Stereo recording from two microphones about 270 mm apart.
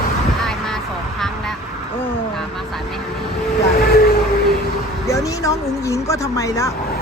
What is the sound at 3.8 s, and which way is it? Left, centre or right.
Vehicle, left.